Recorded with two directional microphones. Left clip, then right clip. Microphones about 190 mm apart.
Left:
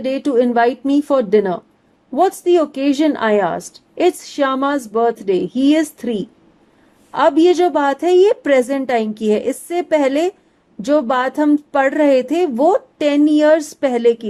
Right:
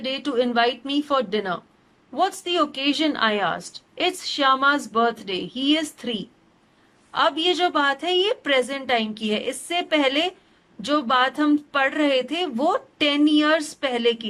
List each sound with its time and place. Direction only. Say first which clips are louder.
0.0 s speech: left 8 dB; 30° left (ahead or behind)